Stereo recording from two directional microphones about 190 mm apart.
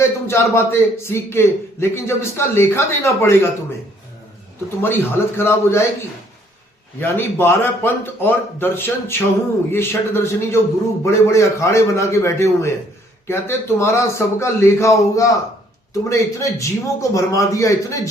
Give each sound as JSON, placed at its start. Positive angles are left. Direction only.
{"t": 0.0, "sound": "a man's voice", "side_deg": 15}
{"t": 4.8, "sound": "a man's voice", "side_deg": 10}
{"t": 7.0, "sound": "a man's voice", "side_deg": 10}